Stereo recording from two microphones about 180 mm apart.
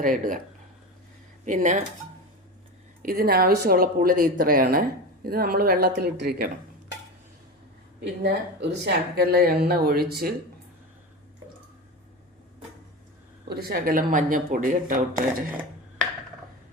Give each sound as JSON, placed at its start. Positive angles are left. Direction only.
{"t": 0.0, "sound": "speech", "side_deg": -50}
{"t": 1.5, "sound": "speech", "side_deg": -40}
{"t": 3.0, "sound": "speech", "side_deg": -55}
{"t": 8.0, "sound": "speech", "side_deg": -70}
{"t": 13.5, "sound": "speech", "side_deg": -60}